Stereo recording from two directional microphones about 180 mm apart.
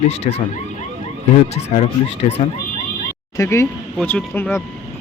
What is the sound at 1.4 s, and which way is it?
Speech, 35° left (ahead or behind).